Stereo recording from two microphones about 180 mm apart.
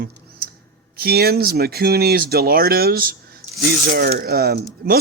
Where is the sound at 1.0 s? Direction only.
60° right (ahead or behind).